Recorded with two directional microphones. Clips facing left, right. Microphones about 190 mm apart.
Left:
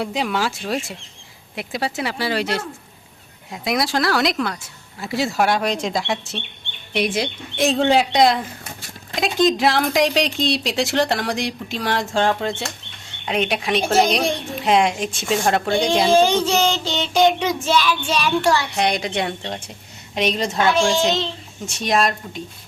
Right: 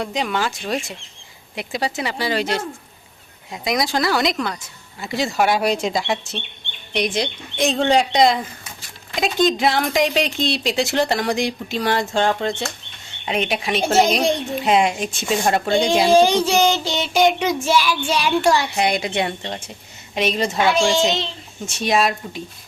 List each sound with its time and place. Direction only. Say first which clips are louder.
0.0 s speech: even; 5° left (ahead or behind)
16.0 s child singing: right 1 dB; 10° right (ahead or behind)
18.8 s speech: right 1 dB; 5° right (ahead or behind)